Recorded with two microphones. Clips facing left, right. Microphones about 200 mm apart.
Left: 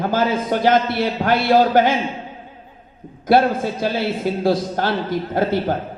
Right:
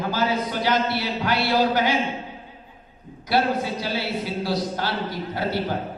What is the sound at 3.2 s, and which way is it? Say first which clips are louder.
A man's voice: left 6 dB; 50° left (ahead or behind).